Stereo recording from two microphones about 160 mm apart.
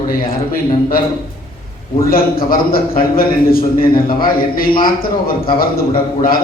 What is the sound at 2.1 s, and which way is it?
A man's voice, 65° left (ahead or behind).